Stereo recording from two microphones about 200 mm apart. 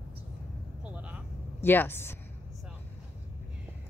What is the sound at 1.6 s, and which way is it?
Speech, 10° left (ahead or behind).